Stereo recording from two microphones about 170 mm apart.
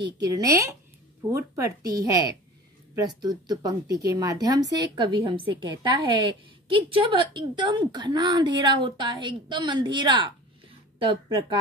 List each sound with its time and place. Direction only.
0.0 s speech: 20° right (ahead or behind)